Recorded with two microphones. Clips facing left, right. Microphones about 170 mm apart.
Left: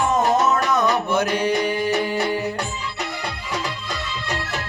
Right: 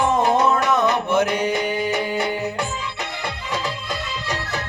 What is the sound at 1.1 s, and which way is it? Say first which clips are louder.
Music: right 1 dB; 20° right (ahead or behind).